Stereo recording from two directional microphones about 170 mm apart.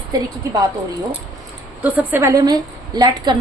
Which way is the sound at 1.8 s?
10° right (ahead or behind).